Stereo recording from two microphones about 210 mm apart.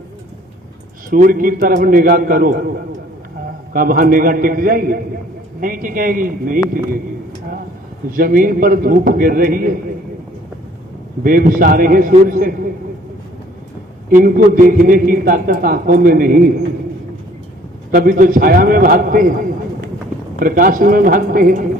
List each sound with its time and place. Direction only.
1.1 s a man's voice: 40° right (ahead or behind)
8.1 s a man's voice: 40° right (ahead or behind)
11.2 s a man's voice: 40° right (ahead or behind)
14.1 s a man's voice: 40° right (ahead or behind)
17.9 s a man's voice: 40° right (ahead or behind)